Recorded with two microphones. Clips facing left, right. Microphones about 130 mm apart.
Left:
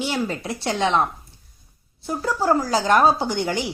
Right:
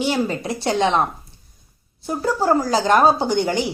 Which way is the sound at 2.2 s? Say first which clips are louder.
Right 2 dB; 25° right (ahead or behind).